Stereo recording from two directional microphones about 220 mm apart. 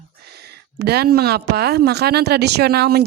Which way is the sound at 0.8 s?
45° right (ahead or behind).